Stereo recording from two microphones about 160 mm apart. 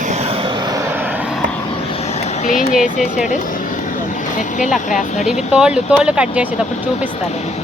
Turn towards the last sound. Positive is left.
turn(degrees=-5)  # may be behind; listen again after turning